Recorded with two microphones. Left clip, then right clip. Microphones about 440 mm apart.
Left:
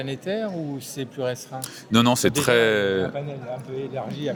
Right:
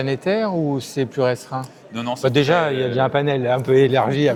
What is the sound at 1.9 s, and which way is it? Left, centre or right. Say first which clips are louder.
Speech: left 7 dB; left.